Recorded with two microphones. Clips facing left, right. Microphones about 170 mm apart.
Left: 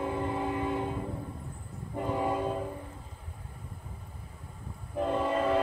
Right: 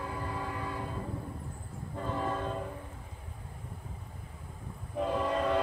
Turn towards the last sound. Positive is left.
turn(degrees=0)  # may be behind; listen again after turning